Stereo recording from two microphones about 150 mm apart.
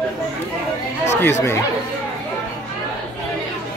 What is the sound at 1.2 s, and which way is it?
Speech, 15° left (ahead or behind).